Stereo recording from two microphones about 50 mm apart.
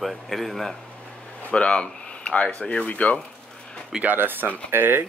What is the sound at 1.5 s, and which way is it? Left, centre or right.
Speech, left.